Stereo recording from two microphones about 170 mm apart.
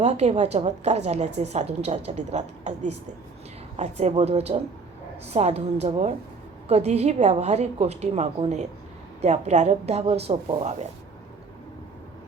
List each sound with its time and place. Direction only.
0.0 s a woman's voice: 40° right (ahead or behind)